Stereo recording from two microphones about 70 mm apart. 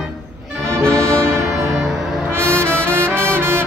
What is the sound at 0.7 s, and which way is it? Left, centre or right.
Music, right.